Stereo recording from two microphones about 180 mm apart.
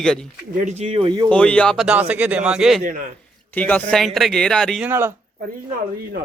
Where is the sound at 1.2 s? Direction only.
5° left (ahead or behind).